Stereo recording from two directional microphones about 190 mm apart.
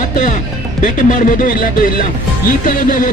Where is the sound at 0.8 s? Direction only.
40° left (ahead or behind).